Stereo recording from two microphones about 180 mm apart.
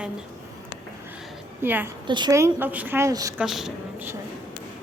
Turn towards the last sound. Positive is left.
turn(degrees=-5)  # may be behind; listen again after turning